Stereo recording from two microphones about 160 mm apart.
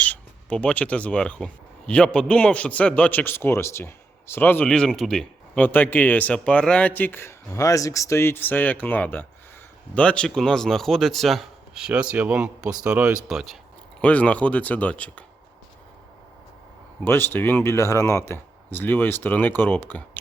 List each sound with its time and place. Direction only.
0.0 s a man's voice: 10° left (ahead or behind)
17.0 s a man's voice: 15° left (ahead or behind)